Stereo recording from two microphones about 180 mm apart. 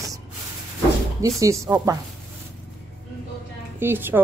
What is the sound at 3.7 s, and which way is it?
Speech, 10° right (ahead or behind).